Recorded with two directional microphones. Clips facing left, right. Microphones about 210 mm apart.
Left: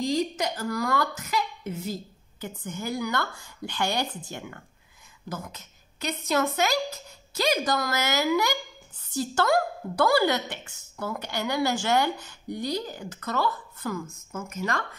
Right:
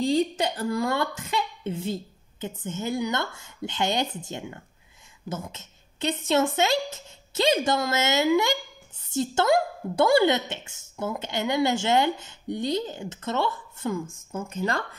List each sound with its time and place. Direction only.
0.0 s a woman's voice: 30° right (ahead or behind)